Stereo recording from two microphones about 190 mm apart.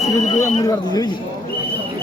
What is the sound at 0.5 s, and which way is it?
Speech, 20° left (ahead or behind).